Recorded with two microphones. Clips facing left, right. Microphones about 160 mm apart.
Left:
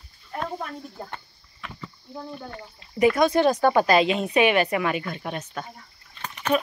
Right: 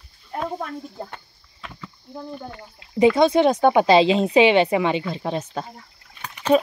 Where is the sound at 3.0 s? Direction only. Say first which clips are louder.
Right 3 dB; 25° right (ahead or behind).